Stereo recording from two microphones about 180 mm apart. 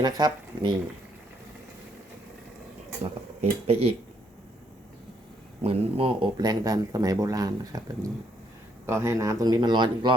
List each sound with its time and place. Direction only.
0.0 s speech: 20° right (ahead or behind)
3.4 s speech: 35° right (ahead or behind)
5.6 s speech: 30° right (ahead or behind)